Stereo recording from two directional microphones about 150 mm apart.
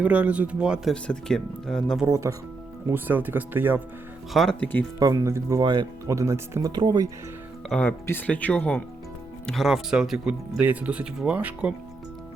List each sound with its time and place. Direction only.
0.0 s speech: 10° right (ahead or behind)
1.0 s speech: 5° left (ahead or behind)
2.0 s speech: 20° right (ahead or behind)
4.4 s speech: 5° left (ahead or behind)
4.9 s speech: 25° right (ahead or behind)
7.7 s speech: 10° left (ahead or behind); by 11.7 s 10° right (ahead or behind)